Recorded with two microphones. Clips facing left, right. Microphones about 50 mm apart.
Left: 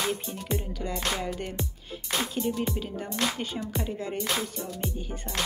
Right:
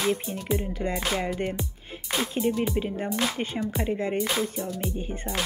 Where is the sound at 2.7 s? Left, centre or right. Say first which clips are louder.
Right 5 dB; right.